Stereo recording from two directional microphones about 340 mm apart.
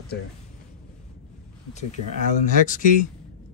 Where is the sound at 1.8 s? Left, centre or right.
Centre.